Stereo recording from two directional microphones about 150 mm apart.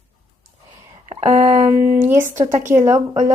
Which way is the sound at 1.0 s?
40° right (ahead or behind).